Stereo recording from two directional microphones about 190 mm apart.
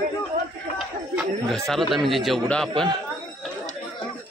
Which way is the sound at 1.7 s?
Centre (ahead or behind).